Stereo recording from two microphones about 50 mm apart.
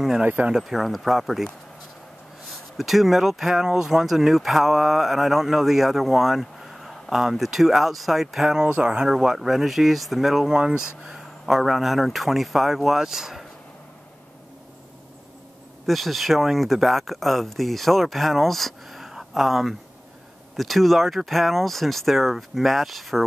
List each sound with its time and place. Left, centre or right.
0.6 s speech: centre
2.8 s speech: centre
8.6 s speech: right
9.1 s speech: centre
15.9 s speech: centre